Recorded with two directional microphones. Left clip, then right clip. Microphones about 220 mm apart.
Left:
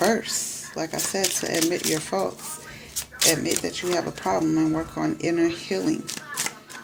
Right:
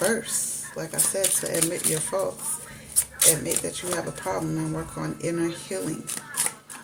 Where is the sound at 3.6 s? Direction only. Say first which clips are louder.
Left 4 dB; 45° left (ahead or behind).